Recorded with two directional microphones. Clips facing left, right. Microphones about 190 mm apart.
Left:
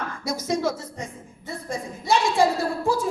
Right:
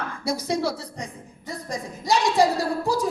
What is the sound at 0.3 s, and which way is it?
A woman's voice, 35° right (ahead or behind).